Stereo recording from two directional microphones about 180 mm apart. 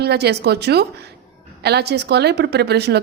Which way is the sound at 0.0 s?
65° right (ahead or behind).